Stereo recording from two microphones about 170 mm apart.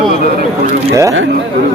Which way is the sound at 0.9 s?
20° right (ahead or behind).